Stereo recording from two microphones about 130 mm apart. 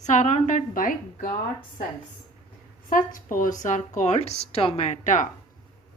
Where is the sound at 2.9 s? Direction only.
90° left; by 5.2 s 70° left (ahead or behind).